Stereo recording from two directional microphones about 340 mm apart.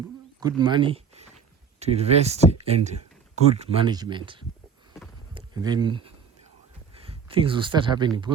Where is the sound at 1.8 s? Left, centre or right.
Centre.